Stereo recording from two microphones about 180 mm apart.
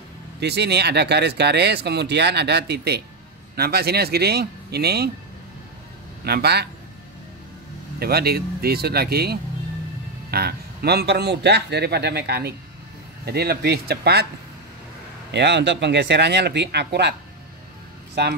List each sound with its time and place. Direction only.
0.4 s a man's voice: 70° right (ahead or behind)
6.2 s a man's voice: 65° right (ahead or behind)
8.0 s a man's voice: 60° right (ahead or behind)
15.3 s speech: 75° right (ahead or behind)
18.2 s speech: 65° right (ahead or behind)